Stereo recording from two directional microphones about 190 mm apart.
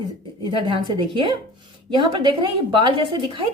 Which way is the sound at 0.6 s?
25° right (ahead or behind).